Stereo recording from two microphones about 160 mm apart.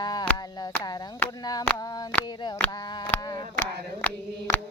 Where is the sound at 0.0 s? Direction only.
25° left (ahead or behind).